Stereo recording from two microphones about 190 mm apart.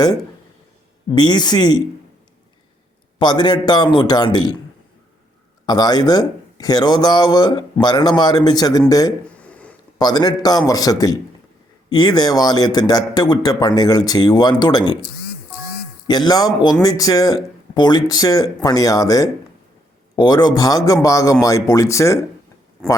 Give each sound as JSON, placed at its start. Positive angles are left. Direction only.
{"t": 1.1, "sound": "speech", "side_deg": 20}
{"t": 3.2, "sound": "speech", "side_deg": 25}
{"t": 5.6, "sound": "speech", "side_deg": 20}
{"t": 9.4, "sound": "a sound", "side_deg": 5}
{"t": 10.0, "sound": "speech", "side_deg": 20}
{"t": 16.0, "sound": "speech", "side_deg": 20}